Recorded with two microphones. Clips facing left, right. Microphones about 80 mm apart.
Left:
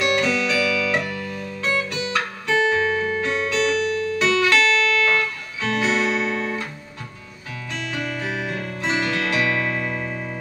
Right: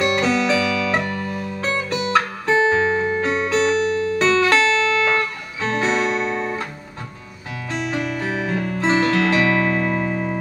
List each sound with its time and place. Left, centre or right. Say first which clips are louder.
0.0 s music: right 2 dB; right
8.2 s music: right 4 dB; right